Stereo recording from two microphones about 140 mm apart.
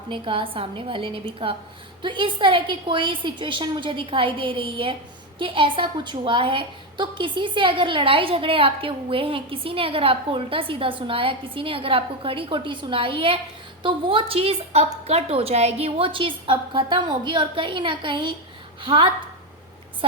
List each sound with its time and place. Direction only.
0.1 s a woman's voice: 40° right (ahead or behind)